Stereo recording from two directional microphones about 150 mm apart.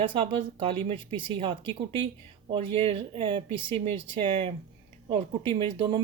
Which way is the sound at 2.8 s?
40° right (ahead or behind).